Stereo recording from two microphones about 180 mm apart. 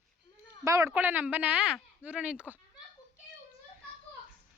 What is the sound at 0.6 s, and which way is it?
Speech, 15° right (ahead or behind).